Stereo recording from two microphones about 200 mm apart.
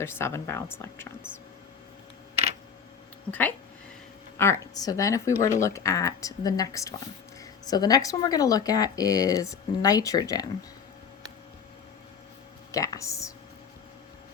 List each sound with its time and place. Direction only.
0.0 s speech: 10° left (ahead or behind)
4.4 s speech: 15° left (ahead or behind)
12.7 s speech: 15° left (ahead or behind)